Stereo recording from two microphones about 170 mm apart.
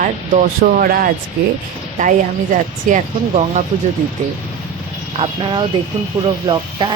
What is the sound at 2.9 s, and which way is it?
Speech, 45° right (ahead or behind).